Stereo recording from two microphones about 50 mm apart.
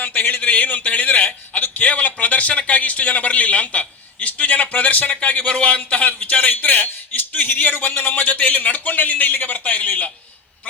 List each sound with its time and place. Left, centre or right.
0.0 s a man's voice: left